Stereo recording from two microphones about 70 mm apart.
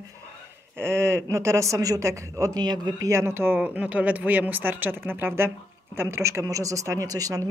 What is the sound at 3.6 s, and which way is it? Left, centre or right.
Speech, centre.